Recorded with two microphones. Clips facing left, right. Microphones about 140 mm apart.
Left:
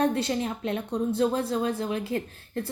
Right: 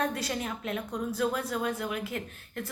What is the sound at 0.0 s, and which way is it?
A woman's voice, 30° left (ahead or behind).